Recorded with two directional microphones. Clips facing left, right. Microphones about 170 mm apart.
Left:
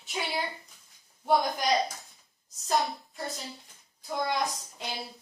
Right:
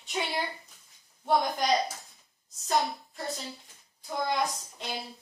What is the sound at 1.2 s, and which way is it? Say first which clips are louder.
A woman's voice: even; centre (ahead or behind).